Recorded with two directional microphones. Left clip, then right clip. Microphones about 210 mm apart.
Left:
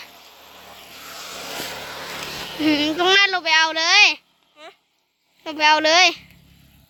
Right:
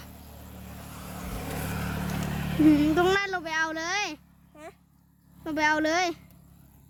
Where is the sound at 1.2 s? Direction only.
50° right (ahead or behind).